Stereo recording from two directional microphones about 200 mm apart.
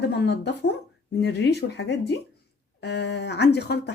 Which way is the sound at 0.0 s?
55° left (ahead or behind).